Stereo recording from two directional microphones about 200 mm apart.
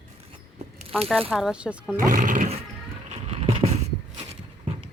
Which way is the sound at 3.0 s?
30° right (ahead or behind).